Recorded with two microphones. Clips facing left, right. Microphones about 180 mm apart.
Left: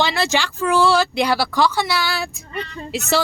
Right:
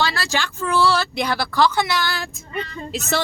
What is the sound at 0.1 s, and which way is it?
A woman's voice, 15° left (ahead or behind).